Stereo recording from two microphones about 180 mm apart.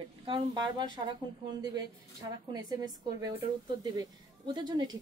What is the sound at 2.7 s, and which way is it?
A woman's voice, 20° right (ahead or behind).